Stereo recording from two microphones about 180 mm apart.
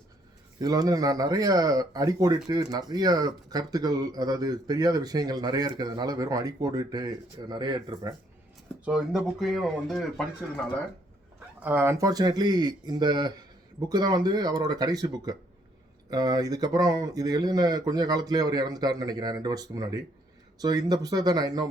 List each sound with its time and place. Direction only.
0.6 s speech: 20° right (ahead or behind)
8.8 s speech: 5° right (ahead or behind)
11.3 s speech: 10° right (ahead or behind)